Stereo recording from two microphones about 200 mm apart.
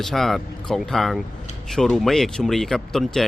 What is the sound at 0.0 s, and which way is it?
Speech, centre (ahead or behind).